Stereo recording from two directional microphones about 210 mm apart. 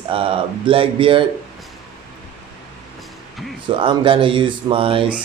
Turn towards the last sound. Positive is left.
turn(degrees=-25)  # may be behind; listen again after turning